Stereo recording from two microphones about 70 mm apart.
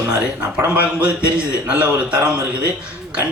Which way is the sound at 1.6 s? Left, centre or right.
Centre.